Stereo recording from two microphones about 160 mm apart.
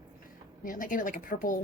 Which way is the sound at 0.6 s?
55° left (ahead or behind).